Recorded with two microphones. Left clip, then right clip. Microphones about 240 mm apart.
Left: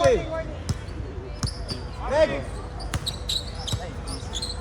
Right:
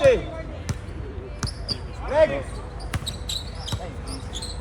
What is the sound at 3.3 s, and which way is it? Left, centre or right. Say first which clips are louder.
Basketball bounce: left 3 dB; centre.